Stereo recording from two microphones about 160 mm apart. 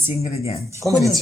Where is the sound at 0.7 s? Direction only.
20° right (ahead or behind).